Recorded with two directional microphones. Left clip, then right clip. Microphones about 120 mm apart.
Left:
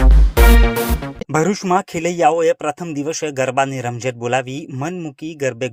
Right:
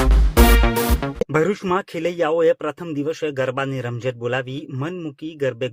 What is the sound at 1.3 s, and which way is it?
Speech, 20° left (ahead or behind).